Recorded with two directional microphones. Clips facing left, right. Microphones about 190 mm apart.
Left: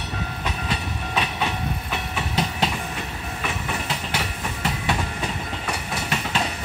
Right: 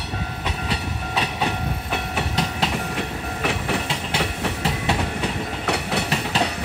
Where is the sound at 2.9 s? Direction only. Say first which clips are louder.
Right 4 dB; 80° right.